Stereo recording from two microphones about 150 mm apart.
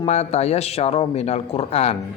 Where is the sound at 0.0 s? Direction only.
45° left (ahead or behind).